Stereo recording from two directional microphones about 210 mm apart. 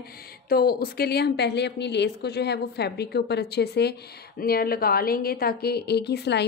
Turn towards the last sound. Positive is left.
turn(degrees=50)  # may be behind; listen again after turning